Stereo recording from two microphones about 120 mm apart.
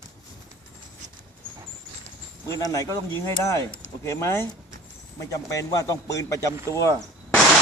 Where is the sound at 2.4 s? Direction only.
30° left (ahead or behind).